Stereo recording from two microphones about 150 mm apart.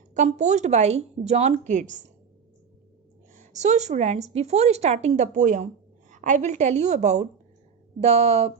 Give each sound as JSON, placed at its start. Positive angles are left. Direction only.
{"t": 0.1, "sound": "a woman's voice", "side_deg": -55}
{"t": 3.3, "sound": "a woman's voice", "side_deg": -50}